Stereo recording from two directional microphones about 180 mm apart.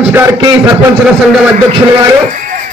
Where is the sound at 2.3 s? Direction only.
45° right (ahead or behind).